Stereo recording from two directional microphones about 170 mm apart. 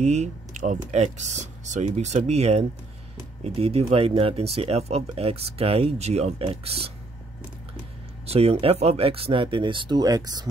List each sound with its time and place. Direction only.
0.0 s speech: 45° right (ahead or behind)
8.3 s speech: 35° right (ahead or behind)